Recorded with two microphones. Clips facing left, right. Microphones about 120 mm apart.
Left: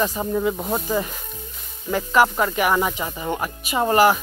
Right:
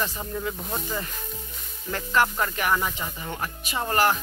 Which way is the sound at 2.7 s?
25° left (ahead or behind).